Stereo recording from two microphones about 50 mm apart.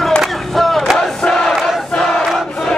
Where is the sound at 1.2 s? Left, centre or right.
Centre.